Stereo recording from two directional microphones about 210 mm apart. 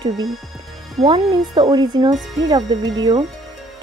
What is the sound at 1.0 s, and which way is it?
Speech, 20° right (ahead or behind).